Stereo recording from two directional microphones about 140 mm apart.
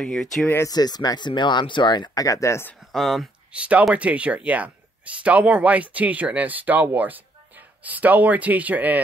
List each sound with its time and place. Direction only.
0.0 s speech: 5° left (ahead or behind)
0.7 s speech: 30° left (ahead or behind)
2.9 s speech: centre (ahead or behind)